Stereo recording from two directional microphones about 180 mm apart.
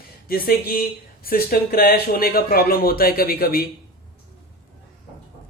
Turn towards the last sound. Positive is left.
turn(degrees=55)  # may be behind; listen again after turning